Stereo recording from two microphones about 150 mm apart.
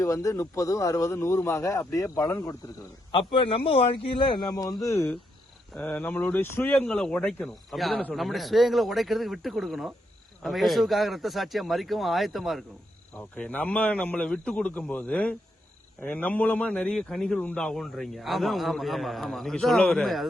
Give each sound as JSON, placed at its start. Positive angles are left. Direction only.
{"t": 0.0, "sound": "speech", "side_deg": 20}
{"t": 3.1, "sound": "a man's voice", "side_deg": 35}
{"t": 5.7, "sound": "a man's voice", "side_deg": 10}